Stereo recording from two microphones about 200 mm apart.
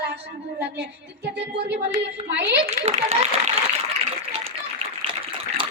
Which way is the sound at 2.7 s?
30° right (ahead or behind).